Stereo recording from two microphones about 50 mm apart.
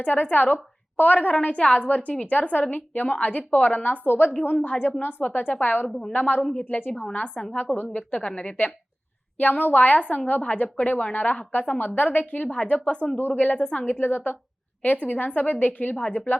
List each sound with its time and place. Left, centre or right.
0.0 s a woman's voice: left
4.0 s a woman's voice: left
5.9 s a woman's voice: centre
6.1 s a woman's voice: left
7.4 s a woman's voice: centre
7.8 s a woman's voice: left
9.4 s a woman's voice: left
13.9 s a woman's voice: left